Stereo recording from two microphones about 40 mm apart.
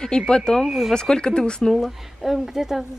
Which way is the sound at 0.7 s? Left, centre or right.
Centre.